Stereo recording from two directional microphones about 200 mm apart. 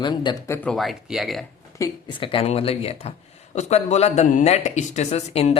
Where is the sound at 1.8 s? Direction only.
25° left (ahead or behind).